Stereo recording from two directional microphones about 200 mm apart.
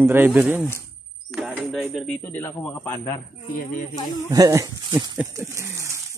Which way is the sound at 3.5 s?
45° left (ahead or behind).